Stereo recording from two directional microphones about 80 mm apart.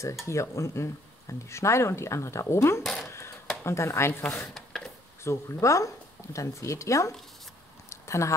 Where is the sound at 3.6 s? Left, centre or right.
Left.